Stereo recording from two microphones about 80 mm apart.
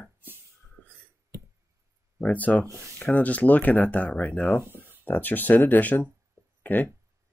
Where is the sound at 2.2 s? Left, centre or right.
Centre.